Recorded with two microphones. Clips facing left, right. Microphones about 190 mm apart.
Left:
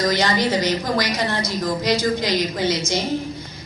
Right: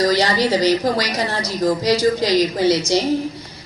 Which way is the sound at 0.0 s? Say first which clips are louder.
Right 3 dB; 35° right (ahead or behind).